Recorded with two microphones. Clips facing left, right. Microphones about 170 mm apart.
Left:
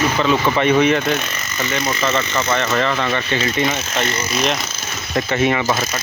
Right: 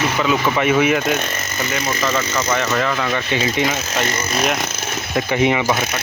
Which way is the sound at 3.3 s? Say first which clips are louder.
Right 1 dB; 15° right (ahead or behind).